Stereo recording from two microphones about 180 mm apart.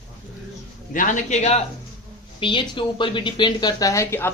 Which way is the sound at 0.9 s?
45° left (ahead or behind).